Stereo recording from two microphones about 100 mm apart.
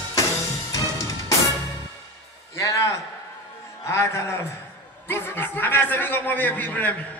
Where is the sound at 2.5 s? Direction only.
30° left (ahead or behind).